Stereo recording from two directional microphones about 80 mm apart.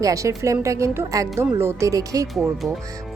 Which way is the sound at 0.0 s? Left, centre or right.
Right.